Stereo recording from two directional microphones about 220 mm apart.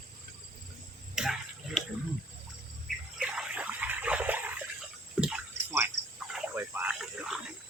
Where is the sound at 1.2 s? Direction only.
Centre (ahead or behind).